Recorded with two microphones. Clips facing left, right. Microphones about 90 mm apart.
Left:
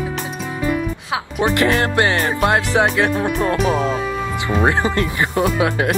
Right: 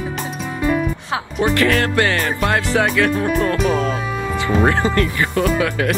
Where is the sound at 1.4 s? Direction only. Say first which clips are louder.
Even; 20° left (ahead or behind).